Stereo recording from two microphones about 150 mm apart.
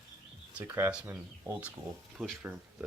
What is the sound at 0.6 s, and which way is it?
Speech, 15° right (ahead or behind).